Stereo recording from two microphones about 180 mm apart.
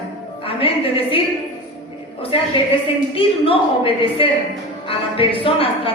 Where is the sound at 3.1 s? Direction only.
30° left (ahead or behind).